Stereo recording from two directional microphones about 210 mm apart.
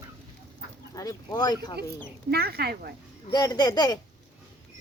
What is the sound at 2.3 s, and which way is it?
Speech, 50° right (ahead or behind).